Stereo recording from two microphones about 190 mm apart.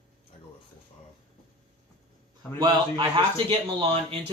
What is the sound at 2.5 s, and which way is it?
A man's voice, 25° right (ahead or behind).